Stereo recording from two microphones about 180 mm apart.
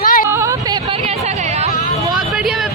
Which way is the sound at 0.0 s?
50° left (ahead or behind).